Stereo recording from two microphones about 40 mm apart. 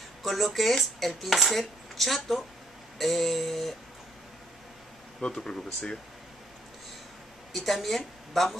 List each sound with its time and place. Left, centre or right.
0.2 s speech: centre
5.3 s speech: centre
7.5 s speech: centre